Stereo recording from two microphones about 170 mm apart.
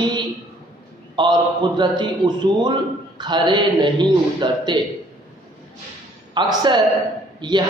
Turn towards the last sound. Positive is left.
turn(degrees=-25)  # may be behind; listen again after turning